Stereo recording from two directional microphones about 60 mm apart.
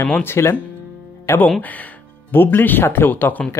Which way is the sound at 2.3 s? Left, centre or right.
Left.